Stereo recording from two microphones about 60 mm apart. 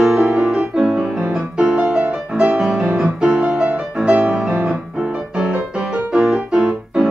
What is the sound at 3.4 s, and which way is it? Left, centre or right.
Music, right.